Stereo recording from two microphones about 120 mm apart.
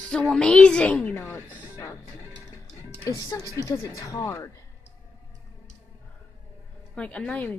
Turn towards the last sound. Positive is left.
turn(degrees=10)  # may be behind; listen again after turning